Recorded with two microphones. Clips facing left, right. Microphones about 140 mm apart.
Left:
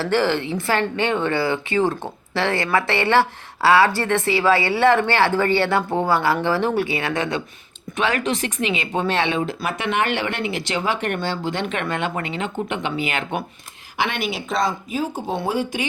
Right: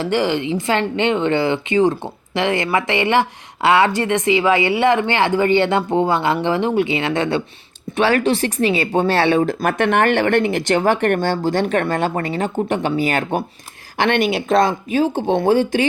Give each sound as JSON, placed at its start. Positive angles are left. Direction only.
{"t": 0.0, "sound": "speech", "side_deg": -15}
{"t": 14.2, "sound": "speech", "side_deg": 0}